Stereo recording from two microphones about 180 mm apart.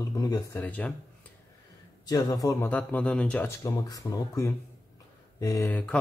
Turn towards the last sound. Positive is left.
turn(degrees=5)  # may be behind; listen again after turning